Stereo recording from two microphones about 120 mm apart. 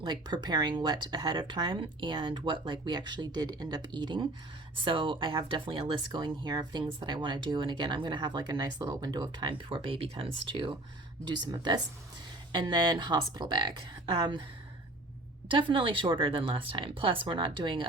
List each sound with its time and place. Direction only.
0.0 s speech: 35° right (ahead or behind)
15.4 s speech: 45° right (ahead or behind)